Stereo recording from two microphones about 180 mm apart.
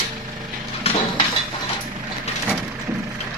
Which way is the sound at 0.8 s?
35° left (ahead or behind).